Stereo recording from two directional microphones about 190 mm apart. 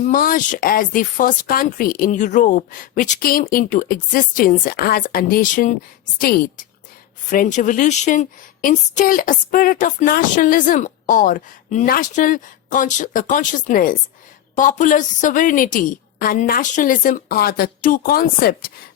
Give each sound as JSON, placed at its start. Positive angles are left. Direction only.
{"t": 0.0, "sound": "a woman's voice", "side_deg": 45}